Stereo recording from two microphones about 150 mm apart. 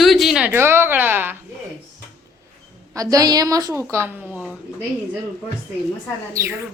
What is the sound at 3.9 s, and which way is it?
Speech, 20° right (ahead or behind).